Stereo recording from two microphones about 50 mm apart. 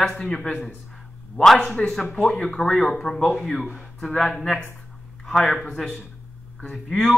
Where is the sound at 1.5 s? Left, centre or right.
Centre.